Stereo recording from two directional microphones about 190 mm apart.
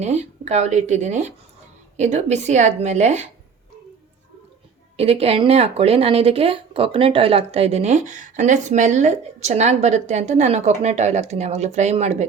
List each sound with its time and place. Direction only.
0.0 s speech: 35° right (ahead or behind)
4.9 s speech: 30° right (ahead or behind)